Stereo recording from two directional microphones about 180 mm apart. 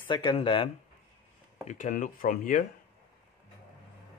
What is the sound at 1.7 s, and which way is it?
Speech, 45° left (ahead or behind).